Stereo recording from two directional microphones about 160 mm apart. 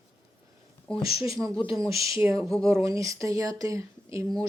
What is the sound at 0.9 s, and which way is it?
Speech, 5° left (ahead or behind).